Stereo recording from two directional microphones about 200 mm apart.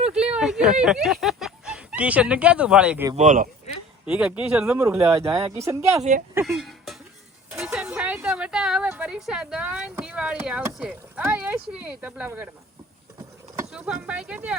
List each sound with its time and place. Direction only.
0.1 s speech: 5° right (ahead or behind)
3.2 s speech: 40° right (ahead or behind)
4.0 s a woman's voice: 5° right (ahead or behind)
6.0 s speech: 40° right (ahead or behind)
6.4 s a woman's voice: centre (ahead or behind)
13.7 s a woman's voice: 5° right (ahead or behind)